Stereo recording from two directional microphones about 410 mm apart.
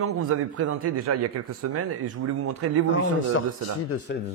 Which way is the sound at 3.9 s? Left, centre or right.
Left.